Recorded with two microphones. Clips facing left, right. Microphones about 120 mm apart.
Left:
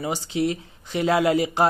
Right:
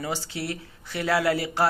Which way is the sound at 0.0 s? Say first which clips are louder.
Left 7 dB; 20° left (ahead or behind).